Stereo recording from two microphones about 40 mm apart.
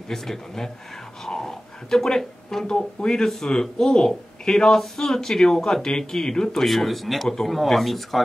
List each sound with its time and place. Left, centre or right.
0.1 s speech: centre
1.2 s a sound: centre
2.0 s speech: centre
6.6 s speech: centre